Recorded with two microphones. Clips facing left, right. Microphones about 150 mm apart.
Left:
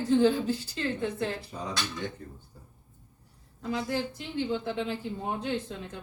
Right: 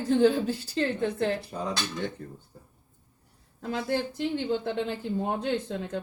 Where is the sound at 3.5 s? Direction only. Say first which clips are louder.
Right 2 dB; 55° right (ahead or behind).